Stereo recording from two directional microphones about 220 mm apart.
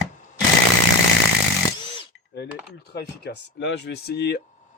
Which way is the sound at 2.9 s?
50° left (ahead or behind).